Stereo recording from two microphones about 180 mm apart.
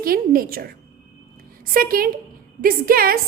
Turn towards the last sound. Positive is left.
turn(degrees=-55)  # may be behind; listen again after turning